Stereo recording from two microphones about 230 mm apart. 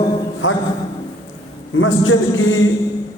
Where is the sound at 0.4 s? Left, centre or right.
Left.